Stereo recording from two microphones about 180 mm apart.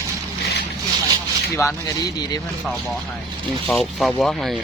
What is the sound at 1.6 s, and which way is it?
Speech, 15° left (ahead or behind).